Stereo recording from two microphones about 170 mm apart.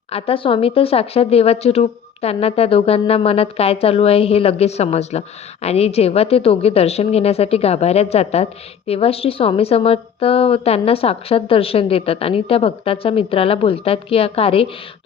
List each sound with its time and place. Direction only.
0.1 s a woman's voice: 35° left (ahead or behind)